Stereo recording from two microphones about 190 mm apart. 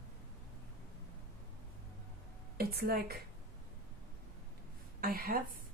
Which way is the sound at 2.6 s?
55° right (ahead or behind).